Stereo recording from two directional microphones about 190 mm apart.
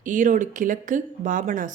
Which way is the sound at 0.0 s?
40° right (ahead or behind).